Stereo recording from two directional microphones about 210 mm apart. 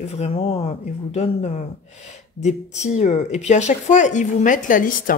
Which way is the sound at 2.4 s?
35° left (ahead or behind).